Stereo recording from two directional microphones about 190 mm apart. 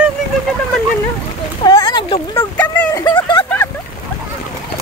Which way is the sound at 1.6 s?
25° left (ahead or behind).